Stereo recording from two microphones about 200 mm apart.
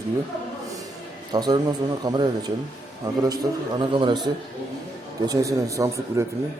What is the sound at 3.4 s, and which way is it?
Speech, 15° right (ahead or behind).